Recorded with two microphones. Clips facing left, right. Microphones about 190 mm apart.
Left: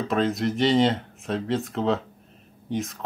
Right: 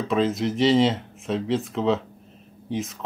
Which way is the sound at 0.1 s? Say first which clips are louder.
Right 2 dB; centre (ahead or behind).